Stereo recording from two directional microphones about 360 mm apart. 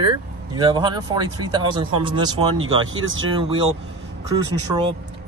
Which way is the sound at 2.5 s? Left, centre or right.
Right.